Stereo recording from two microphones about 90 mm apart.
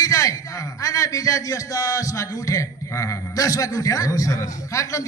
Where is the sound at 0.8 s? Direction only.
40° left (ahead or behind).